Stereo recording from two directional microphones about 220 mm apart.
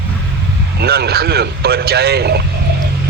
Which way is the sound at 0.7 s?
45° right (ahead or behind).